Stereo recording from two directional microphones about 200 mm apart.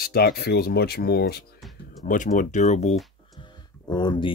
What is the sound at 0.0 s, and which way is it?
Speech, 50° left (ahead or behind).